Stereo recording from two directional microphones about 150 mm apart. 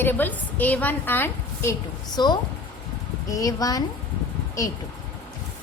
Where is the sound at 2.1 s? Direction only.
30° left (ahead or behind).